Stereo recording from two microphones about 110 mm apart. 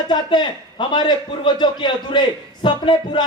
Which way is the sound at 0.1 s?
45° left (ahead or behind).